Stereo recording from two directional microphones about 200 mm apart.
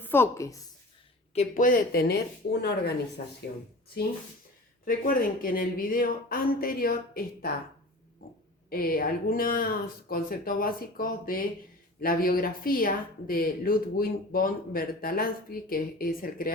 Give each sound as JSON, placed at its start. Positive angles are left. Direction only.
{"t": 0.0, "sound": "a woman's voice", "side_deg": 10}
{"t": 1.3, "sound": "speech", "side_deg": 35}
{"t": 4.9, "sound": "speech", "side_deg": 45}
{"t": 8.7, "sound": "speech", "side_deg": 45}